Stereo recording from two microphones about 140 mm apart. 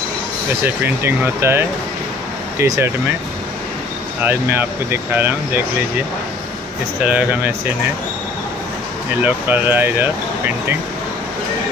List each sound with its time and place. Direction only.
0.8 s speech: 15° right (ahead or behind)
4.2 s speech: 15° right (ahead or behind)
7.1 s speech: 10° right (ahead or behind)
9.2 s speech: 15° right (ahead or behind)